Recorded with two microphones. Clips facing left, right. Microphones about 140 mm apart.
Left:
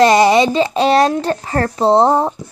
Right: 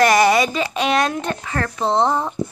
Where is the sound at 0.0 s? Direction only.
25° left (ahead or behind).